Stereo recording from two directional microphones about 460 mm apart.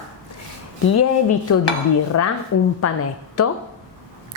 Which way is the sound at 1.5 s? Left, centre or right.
Left.